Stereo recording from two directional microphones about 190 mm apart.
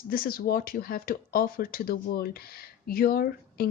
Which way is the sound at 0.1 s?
50° left (ahead or behind).